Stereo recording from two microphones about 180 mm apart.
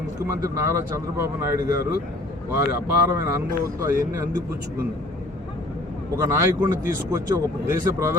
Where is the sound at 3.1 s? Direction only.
15° right (ahead or behind).